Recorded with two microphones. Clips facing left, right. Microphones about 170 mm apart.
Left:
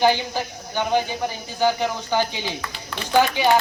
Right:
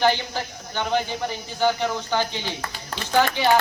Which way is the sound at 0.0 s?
15° left (ahead or behind).